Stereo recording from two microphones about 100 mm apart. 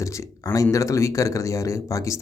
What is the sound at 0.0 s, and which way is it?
Speech, 30° left (ahead or behind).